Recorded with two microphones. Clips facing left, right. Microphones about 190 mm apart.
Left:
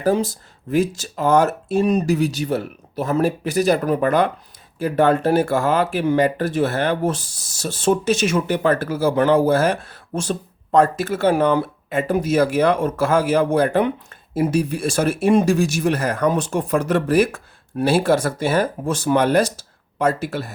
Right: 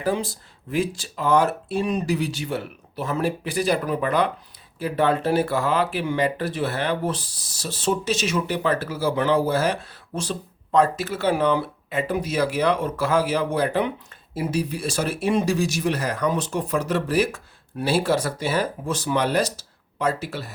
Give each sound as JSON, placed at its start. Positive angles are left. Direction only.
{"t": 0.0, "sound": "speech", "side_deg": 40}